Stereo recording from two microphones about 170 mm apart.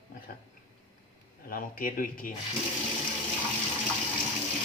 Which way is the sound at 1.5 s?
55° left (ahead or behind).